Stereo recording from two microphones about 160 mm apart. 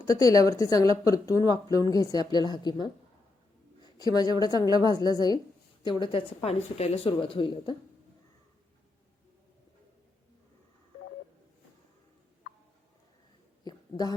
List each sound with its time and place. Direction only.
0.1 s speech: 20° left (ahead or behind)
3.9 s speech: 25° left (ahead or behind)
13.7 s a sound: 25° left (ahead or behind)